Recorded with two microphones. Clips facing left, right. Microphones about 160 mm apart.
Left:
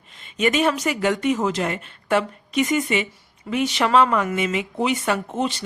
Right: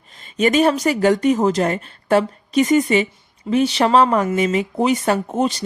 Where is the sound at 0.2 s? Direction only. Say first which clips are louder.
Right 5 dB; 35° right (ahead or behind).